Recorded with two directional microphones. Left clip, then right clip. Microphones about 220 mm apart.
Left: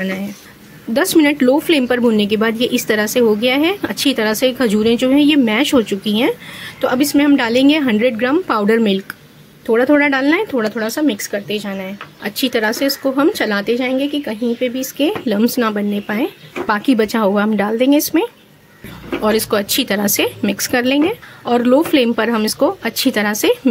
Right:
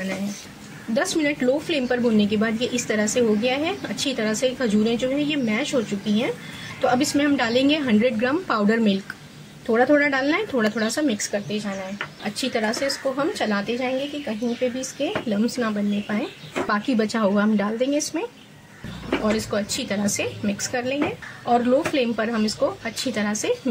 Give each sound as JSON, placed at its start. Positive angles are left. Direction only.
{"t": 0.9, "sound": "a woman's voice", "side_deg": 35}
{"t": 19.2, "sound": "a woman's voice", "side_deg": 45}